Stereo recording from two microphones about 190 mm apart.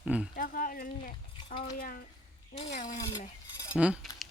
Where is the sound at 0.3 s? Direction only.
45° left (ahead or behind).